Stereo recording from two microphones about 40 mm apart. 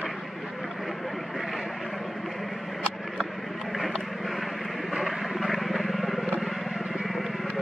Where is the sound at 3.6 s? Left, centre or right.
Centre.